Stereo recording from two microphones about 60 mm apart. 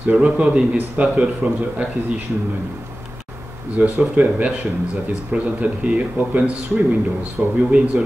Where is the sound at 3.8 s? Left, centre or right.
Right.